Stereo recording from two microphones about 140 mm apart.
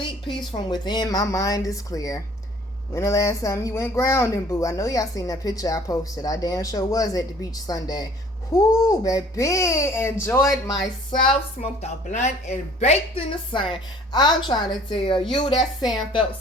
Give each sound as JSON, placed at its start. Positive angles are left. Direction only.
{"t": 0.0, "sound": "speech", "side_deg": 35}
{"t": 10.5, "sound": "speech", "side_deg": 0}
{"t": 11.8, "sound": "speech", "side_deg": 55}
{"t": 13.5, "sound": "a woman's voice", "side_deg": 35}